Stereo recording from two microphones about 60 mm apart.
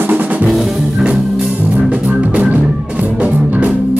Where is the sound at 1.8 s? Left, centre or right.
Right.